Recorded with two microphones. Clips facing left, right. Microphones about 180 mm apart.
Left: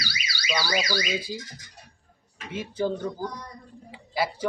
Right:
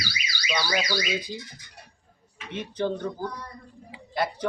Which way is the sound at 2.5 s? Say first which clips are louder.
Left 1 dB; 5° left (ahead or behind).